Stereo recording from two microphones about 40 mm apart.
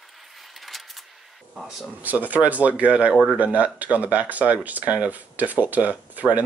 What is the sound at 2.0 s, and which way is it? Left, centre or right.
Speech, right.